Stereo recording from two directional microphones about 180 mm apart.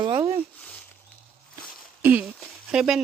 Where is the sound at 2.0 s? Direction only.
10° right (ahead or behind).